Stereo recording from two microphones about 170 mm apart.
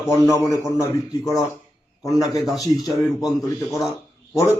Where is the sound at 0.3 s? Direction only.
20° left (ahead or behind).